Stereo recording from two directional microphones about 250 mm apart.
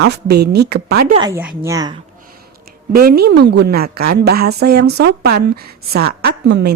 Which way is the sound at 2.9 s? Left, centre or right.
Right.